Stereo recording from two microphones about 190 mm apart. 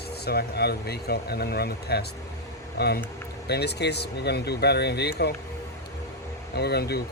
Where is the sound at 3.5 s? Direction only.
60° left (ahead or behind).